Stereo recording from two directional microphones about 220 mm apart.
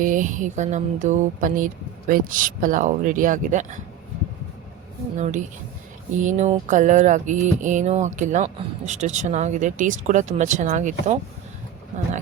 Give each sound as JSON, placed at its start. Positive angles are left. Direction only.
{"t": 0.0, "sound": "speech", "side_deg": -35}
{"t": 5.1, "sound": "speech", "side_deg": -35}